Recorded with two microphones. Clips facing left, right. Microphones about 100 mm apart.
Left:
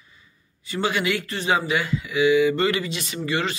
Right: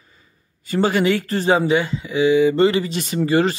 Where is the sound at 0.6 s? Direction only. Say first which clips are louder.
Right 6 dB; 40° right (ahead or behind).